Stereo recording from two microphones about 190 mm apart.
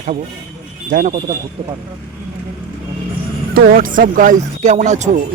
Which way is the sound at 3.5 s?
50° right (ahead or behind).